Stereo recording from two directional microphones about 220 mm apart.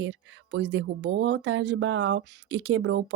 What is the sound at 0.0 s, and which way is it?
Speech, 55° right (ahead or behind).